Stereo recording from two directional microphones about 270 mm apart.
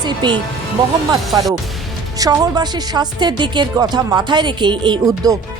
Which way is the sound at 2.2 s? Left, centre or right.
Centre.